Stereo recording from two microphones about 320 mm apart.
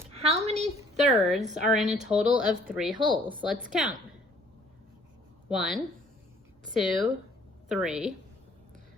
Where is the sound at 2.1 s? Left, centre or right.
Centre.